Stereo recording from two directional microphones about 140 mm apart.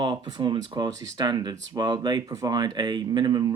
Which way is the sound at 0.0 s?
30° right (ahead or behind).